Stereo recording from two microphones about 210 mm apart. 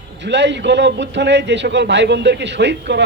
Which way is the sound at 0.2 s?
55° right (ahead or behind).